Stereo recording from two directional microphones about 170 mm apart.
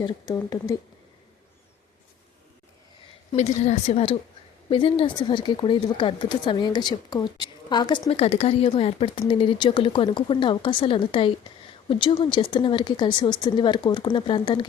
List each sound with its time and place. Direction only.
0.0 s speech: 20° left (ahead or behind)
3.3 s a woman's voice: 40° left (ahead or behind); by 7.9 s 25° left (ahead or behind)
8.1 s speech: 35° left (ahead or behind)